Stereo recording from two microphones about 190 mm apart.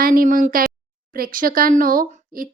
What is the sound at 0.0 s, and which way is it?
Speech, 50° right (ahead or behind).